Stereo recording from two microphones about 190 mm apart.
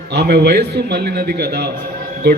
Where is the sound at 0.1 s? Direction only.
60° right (ahead or behind).